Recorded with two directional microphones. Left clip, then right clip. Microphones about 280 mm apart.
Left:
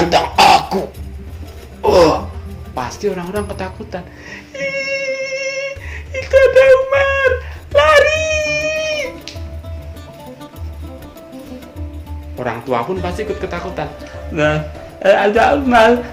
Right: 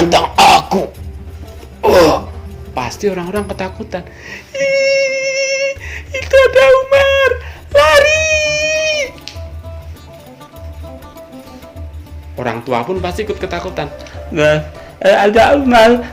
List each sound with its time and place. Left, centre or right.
0.1 s cough: right
1.8 s music: right
3.3 s a sound: right
12.4 s speech: right